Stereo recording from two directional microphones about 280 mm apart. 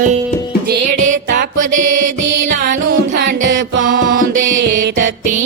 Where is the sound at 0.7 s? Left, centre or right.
Right.